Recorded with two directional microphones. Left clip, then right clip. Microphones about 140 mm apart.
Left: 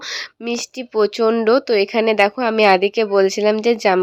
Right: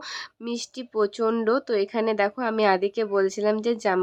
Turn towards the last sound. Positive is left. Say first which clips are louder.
# left 8 dB
turn(degrees=15)  # may be behind; listen again after turning